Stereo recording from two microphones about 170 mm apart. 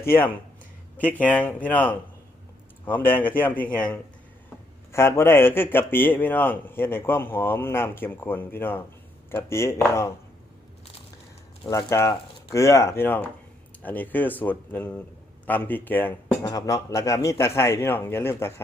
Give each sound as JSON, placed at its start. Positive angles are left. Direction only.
{"t": 0.1, "sound": "a man's voice", "side_deg": 10}
{"t": 11.7, "sound": "a man's voice", "side_deg": 20}